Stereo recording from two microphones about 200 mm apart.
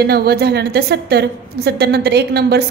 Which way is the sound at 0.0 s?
50° right (ahead or behind).